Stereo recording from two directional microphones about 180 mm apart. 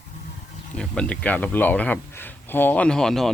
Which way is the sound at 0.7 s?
5° left (ahead or behind).